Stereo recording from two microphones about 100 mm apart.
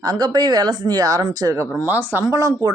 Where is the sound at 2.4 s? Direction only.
40° right (ahead or behind).